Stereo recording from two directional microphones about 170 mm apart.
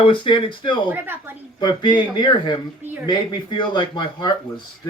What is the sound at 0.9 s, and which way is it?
Speech, 10° right (ahead or behind).